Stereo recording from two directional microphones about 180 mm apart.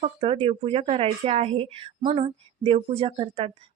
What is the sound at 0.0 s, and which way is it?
Speech, 35° right (ahead or behind).